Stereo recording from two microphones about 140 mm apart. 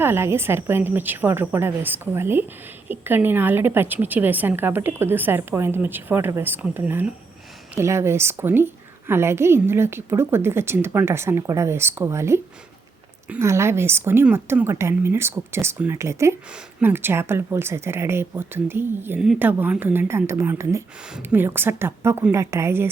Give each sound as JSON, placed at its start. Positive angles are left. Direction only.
{"t": 0.0, "sound": "a woman's voice", "side_deg": -15}